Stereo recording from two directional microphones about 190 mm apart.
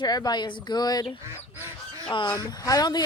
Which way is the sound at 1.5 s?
10° right (ahead or behind).